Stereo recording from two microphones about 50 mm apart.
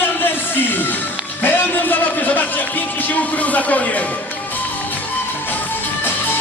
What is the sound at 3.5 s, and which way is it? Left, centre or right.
Speech, left.